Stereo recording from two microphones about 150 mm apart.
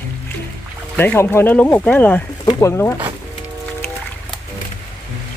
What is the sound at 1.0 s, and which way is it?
Speech, 15° left (ahead or behind).